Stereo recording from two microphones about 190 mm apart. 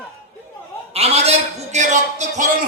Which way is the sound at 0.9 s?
35° right (ahead or behind).